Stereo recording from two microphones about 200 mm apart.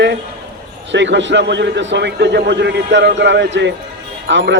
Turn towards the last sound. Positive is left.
turn(degrees=-65)  # may be behind; listen again after turning